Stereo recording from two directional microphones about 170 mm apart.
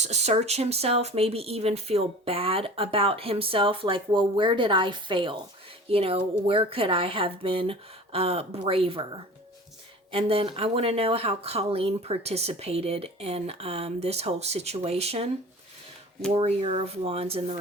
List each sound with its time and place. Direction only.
0.0 s speech: 40° right (ahead or behind)
16.3 s speech: 35° right (ahead or behind)